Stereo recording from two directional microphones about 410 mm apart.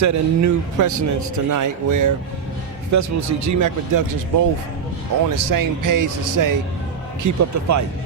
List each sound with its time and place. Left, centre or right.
0.0 s speech: right